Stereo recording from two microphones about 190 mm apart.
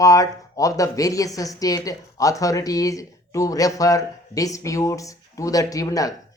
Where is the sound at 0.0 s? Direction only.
20° left (ahead or behind).